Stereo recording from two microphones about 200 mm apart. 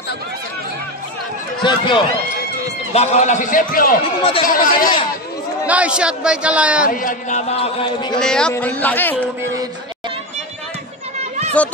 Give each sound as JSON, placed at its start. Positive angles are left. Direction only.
{"t": 1.6, "sound": "speech", "side_deg": 25}
{"t": 2.6, "sound": "speech", "side_deg": 35}
{"t": 4.0, "sound": "speech", "side_deg": 30}
{"t": 4.5, "sound": "speech", "side_deg": 45}
{"t": 5.7, "sound": "a man's voice", "side_deg": -5}
{"t": 6.9, "sound": "a man's voice", "side_deg": 40}
{"t": 8.2, "sound": "a man's voice", "side_deg": 5}